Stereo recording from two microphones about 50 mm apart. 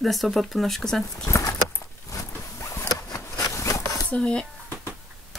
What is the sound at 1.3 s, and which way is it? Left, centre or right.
Keys jangling, left.